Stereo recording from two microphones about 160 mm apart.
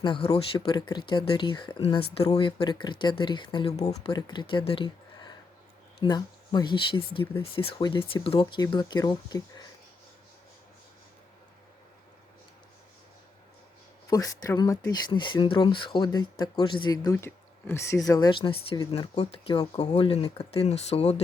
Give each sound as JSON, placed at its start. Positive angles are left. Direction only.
{"t": 0.0, "sound": "speech", "side_deg": 30}
{"t": 4.1, "sound": "speech", "side_deg": 30}
{"t": 14.1, "sound": "speech", "side_deg": 25}